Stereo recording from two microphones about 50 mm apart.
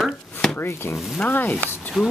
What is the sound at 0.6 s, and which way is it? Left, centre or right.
Chopping, left.